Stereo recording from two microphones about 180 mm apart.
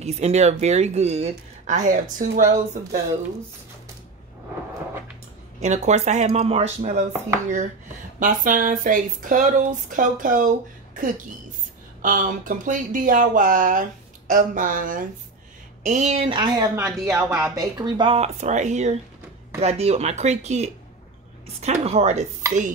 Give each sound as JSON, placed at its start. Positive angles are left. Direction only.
{"t": 0.0, "sound": "a woman's voice", "side_deg": -35}
{"t": 5.6, "sound": "a woman's voice", "side_deg": -40}
{"t": 8.2, "sound": "speech", "side_deg": -45}
{"t": 12.0, "sound": "a woman's voice", "side_deg": -50}